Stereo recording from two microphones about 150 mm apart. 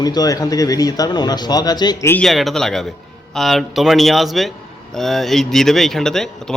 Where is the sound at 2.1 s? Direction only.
5° left (ahead or behind).